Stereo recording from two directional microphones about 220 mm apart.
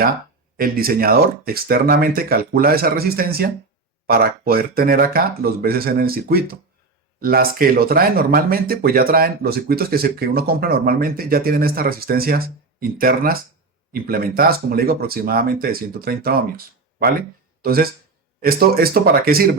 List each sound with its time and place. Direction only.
0.5 s speech: 45° right (ahead or behind)